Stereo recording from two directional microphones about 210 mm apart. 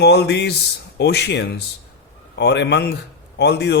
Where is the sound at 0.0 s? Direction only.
50° left (ahead or behind).